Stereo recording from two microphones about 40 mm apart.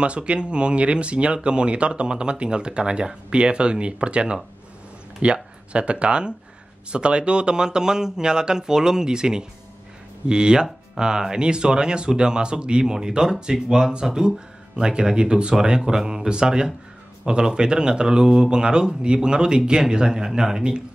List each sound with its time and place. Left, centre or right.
0.0 s speech: right